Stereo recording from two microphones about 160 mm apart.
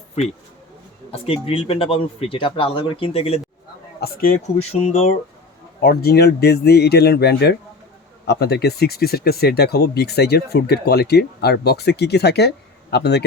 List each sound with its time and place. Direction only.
1.1 s speech: 35° left (ahead or behind)
4.0 s speech: 65° left (ahead or behind)
4.5 s speech: 40° left (ahead or behind)
5.8 s speech: 75° left (ahead or behind)